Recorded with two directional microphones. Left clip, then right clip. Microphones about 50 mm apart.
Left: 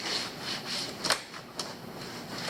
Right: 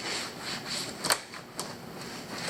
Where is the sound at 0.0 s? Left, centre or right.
Centre.